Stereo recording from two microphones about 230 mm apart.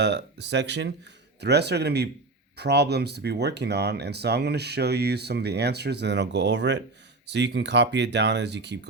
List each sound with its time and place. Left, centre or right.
0.0 s speech: right